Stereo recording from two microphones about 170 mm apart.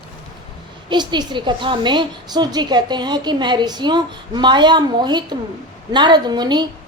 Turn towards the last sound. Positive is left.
turn(degrees=-25)  # may be behind; listen again after turning